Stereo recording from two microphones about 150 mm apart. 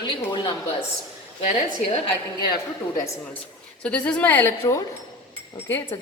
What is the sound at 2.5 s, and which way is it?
Speech, 25° left (ahead or behind).